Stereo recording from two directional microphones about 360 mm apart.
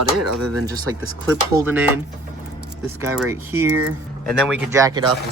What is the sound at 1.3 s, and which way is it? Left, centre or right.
Speech, centre.